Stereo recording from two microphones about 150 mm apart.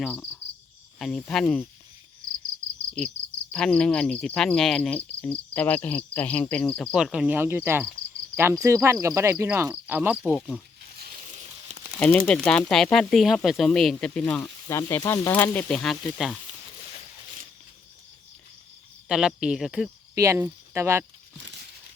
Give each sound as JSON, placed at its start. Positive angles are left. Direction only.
{"t": 0.0, "sound": "speech", "side_deg": 5}
{"t": 3.5, "sound": "speech", "side_deg": 5}
{"t": 6.9, "sound": "speech", "side_deg": -5}
{"t": 10.3, "sound": "speech", "side_deg": 0}
{"t": 11.9, "sound": "speech", "side_deg": 10}
{"t": 14.7, "sound": "speech", "side_deg": 20}
{"t": 19.0, "sound": "speech", "side_deg": -5}
{"t": 20.1, "sound": "speech", "side_deg": -20}